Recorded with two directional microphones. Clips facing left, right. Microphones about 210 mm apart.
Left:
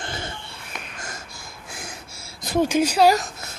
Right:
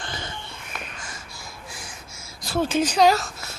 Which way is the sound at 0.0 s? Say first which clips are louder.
Left 2 dB; 25° left (ahead or behind).